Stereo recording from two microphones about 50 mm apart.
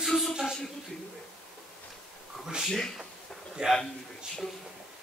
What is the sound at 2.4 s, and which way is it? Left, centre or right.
A man's voice, centre.